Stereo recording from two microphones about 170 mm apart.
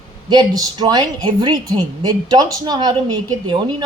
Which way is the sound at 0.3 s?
25° right (ahead or behind).